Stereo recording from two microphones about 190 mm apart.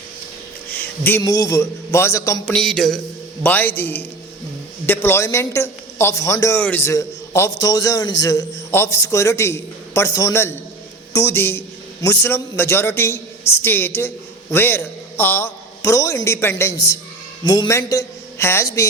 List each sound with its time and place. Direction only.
0.7 s a man's voice: 10° left (ahead or behind)
2.5 s a sound: centre (ahead or behind)
3.4 s a man's voice: 10° left (ahead or behind)